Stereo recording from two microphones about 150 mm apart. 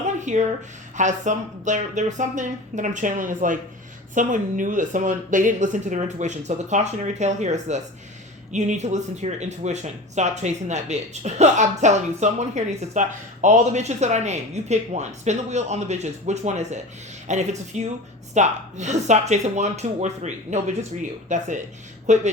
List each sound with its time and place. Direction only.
0.2 s a woman's voice: 55° right (ahead or behind)